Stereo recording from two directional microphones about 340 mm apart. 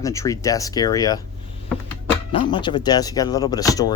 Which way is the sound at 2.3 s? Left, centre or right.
Centre.